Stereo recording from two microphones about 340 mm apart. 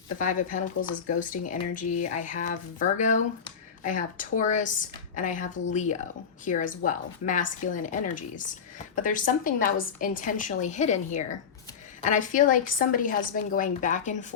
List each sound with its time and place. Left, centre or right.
0.2 s speech: left